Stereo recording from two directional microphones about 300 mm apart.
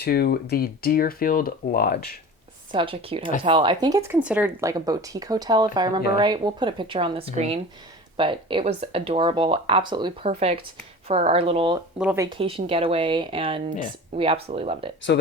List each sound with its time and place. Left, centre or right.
0.0 s speech: left
2.7 s speech: centre
11.9 s speech: centre